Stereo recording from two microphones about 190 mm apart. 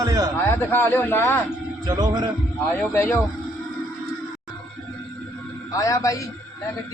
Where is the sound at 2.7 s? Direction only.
10° left (ahead or behind).